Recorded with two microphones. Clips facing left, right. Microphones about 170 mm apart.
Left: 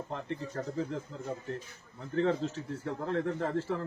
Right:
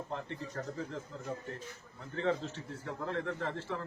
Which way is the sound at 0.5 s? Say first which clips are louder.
Left 5 dB; 35° left (ahead or behind).